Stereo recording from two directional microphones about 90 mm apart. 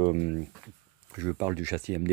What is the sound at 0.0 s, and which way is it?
Speech, 30° right (ahead or behind).